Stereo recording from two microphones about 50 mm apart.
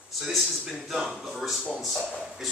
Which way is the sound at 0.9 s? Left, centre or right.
Centre.